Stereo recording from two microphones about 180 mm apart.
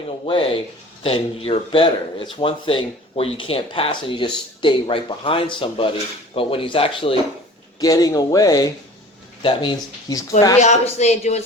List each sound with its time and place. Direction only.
0.3 s speech: 30° left (ahead or behind)
7.8 s speech: 20° left (ahead or behind)
10.6 s speech: 40° left (ahead or behind)